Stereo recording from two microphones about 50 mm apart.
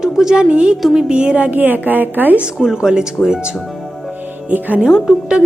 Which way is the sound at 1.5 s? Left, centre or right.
Right.